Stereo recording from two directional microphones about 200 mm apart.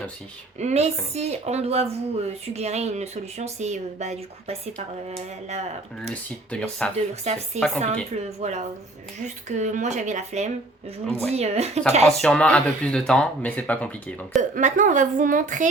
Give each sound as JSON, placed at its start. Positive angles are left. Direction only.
{"t": 0.6, "sound": "a woman's voice", "side_deg": -30}
{"t": 6.0, "sound": "speech", "side_deg": 5}
{"t": 6.9, "sound": "a woman's voice", "side_deg": -30}
{"t": 12.2, "sound": "speech", "side_deg": 5}
{"t": 14.5, "sound": "a woman's voice", "side_deg": -40}